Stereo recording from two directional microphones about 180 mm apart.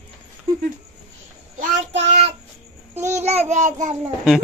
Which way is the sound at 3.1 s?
35° right (ahead or behind).